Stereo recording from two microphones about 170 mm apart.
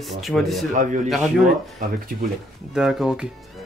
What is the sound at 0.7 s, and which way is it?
Speech, 50° right (ahead or behind).